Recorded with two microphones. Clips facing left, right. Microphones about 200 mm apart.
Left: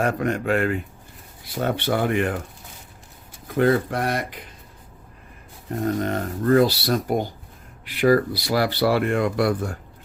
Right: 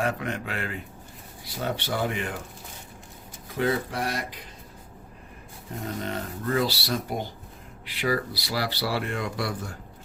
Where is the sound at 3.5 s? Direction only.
55° left (ahead or behind).